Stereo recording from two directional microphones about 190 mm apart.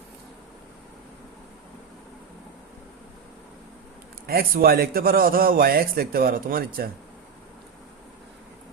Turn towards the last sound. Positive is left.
turn(degrees=-50)  # may be behind; listen again after turning